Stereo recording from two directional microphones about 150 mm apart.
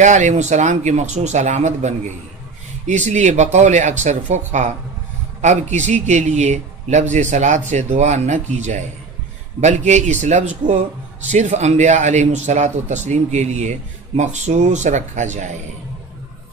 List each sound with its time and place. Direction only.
0.0 s speech: 55° right (ahead or behind)